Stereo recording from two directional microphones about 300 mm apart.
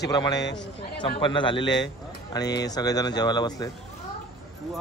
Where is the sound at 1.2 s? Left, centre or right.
Centre.